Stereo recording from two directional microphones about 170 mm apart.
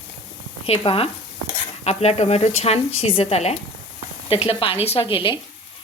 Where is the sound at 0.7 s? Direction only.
35° left (ahead or behind).